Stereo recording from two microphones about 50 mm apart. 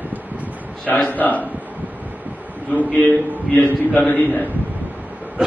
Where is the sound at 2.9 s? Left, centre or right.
Left.